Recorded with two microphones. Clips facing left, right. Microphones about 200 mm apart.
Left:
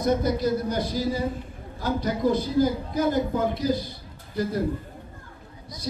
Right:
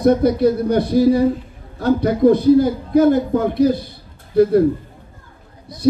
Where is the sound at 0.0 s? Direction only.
65° right (ahead or behind).